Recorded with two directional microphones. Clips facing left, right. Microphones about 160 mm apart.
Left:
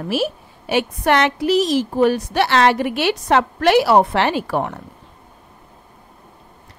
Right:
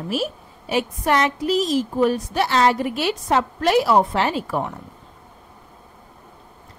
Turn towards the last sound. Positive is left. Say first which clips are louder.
# left 3 dB
turn(degrees=70)  # may be behind; listen again after turning